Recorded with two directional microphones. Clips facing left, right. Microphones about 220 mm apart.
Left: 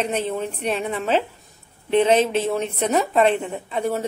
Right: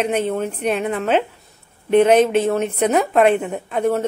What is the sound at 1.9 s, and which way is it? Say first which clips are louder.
Speech: right 4 dB; 55° right (ahead or behind).